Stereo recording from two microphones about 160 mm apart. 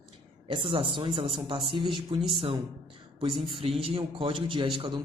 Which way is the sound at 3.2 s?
35° right (ahead or behind).